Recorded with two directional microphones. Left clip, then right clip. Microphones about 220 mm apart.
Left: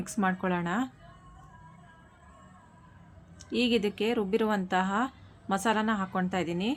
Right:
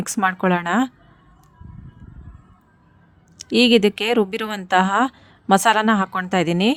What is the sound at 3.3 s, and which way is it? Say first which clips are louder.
Speech: right 13 dB; 50° right (ahead or behind).